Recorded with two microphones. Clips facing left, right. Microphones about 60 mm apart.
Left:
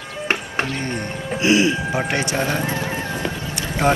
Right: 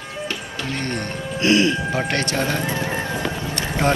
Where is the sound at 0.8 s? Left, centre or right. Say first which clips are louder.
Even; centre.